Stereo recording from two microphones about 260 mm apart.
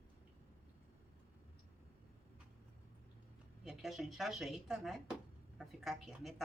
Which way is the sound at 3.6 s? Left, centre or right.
Centre.